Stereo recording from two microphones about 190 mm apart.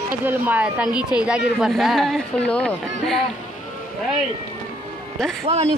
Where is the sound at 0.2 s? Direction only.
10° right (ahead or behind).